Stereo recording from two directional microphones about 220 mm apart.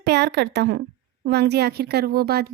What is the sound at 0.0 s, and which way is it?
A woman's voice, 50° right (ahead or behind).